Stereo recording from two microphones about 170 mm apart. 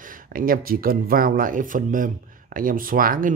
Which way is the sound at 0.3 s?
55° right (ahead or behind).